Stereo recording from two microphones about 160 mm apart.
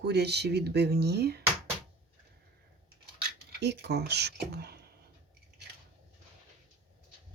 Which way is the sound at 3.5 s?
90° right.